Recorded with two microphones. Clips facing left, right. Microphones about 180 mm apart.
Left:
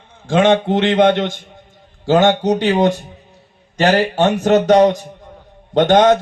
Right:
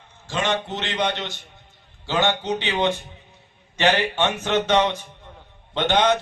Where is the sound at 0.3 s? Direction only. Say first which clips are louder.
Left 12 dB; 55° left (ahead or behind).